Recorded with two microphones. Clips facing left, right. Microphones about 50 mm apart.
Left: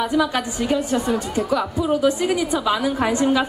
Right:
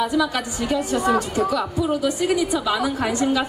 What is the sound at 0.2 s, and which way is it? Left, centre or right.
A man's voice, left.